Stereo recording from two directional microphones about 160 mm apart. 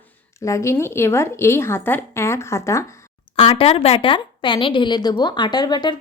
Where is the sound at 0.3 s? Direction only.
20° left (ahead or behind).